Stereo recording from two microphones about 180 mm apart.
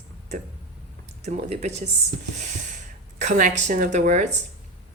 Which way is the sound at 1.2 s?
40° right (ahead or behind).